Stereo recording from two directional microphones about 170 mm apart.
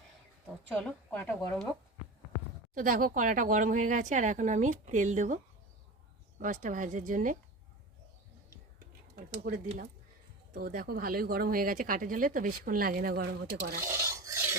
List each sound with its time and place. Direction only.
0.8 s speech: 5° left (ahead or behind)
2.7 s speech: 55° right (ahead or behind)
6.4 s speech: 50° right (ahead or behind)
9.1 s a sound: 60° right (ahead or behind)
10.5 s speech: 55° right (ahead or behind)
13.8 s filing: 15° right (ahead or behind)